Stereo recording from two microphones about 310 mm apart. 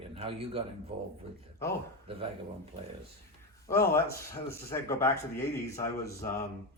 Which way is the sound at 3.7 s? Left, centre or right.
Centre.